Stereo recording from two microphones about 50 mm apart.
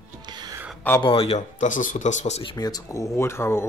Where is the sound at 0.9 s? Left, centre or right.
Left.